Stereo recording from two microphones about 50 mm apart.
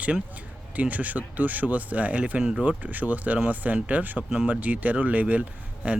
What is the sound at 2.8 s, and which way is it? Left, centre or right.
Speech, right.